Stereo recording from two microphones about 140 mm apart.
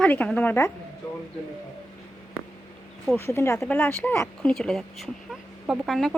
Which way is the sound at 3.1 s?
15° left (ahead or behind).